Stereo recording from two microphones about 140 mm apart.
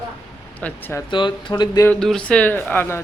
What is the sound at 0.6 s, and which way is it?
Speech, 15° left (ahead or behind).